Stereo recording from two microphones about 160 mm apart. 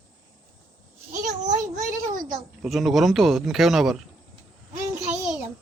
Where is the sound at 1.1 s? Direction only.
50° right (ahead or behind).